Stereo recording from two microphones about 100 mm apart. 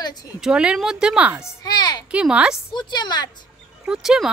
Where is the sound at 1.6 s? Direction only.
45° left (ahead or behind).